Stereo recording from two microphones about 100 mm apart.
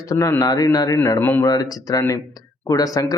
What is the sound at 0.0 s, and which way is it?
Speech, 35° left (ahead or behind).